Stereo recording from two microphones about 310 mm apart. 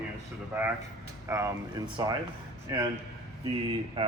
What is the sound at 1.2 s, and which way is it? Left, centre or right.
A man's voice, centre.